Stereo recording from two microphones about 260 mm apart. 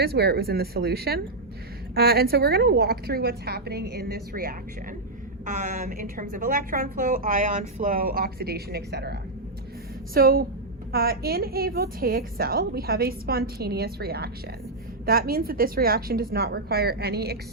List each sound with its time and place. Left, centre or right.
0.0 s a woman's voice: right
10.2 s a woman's voice: right